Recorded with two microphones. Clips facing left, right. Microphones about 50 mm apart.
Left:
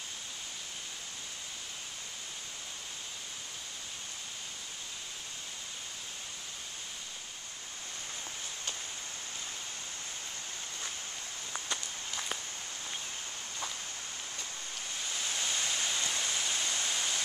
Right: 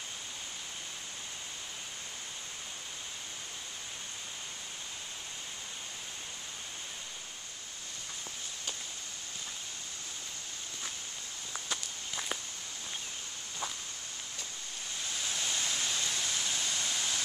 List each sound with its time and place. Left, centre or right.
11.5 s walk: centre
15.1 s waterfall: centre